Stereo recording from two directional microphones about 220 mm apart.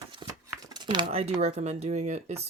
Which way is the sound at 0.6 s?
20° right (ahead or behind).